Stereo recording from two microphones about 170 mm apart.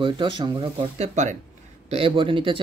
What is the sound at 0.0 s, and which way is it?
Speech, 30° right (ahead or behind).